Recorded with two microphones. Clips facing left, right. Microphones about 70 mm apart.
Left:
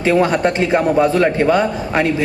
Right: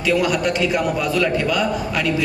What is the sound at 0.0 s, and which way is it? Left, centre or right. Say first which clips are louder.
A man's voice: left 4 dB; left.